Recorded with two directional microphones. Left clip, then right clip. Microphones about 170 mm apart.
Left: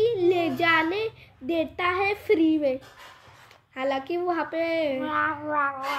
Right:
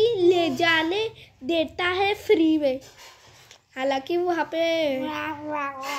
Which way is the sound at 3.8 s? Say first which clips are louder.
Right 3 dB; 15° right (ahead or behind).